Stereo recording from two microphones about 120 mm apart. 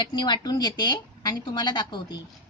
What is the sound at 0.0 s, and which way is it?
Speech, 40° left (ahead or behind).